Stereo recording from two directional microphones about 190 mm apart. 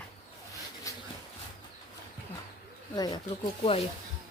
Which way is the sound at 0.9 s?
15° left (ahead or behind).